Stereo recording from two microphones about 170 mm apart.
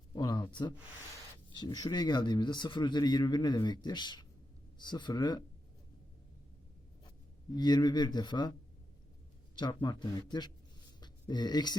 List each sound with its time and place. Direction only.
0.1 s a sound: 25° left (ahead or behind)
1.5 s speech: 25° left (ahead or behind)
7.5 s speech: 25° left (ahead or behind)
9.6 s speech: 25° left (ahead or behind)